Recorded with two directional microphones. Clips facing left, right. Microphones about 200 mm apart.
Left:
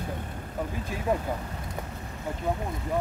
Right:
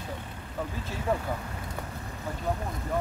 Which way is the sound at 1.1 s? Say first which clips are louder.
Left 2 dB; 15° left (ahead or behind).